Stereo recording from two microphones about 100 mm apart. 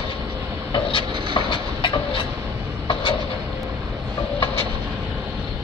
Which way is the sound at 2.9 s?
60° left (ahead or behind).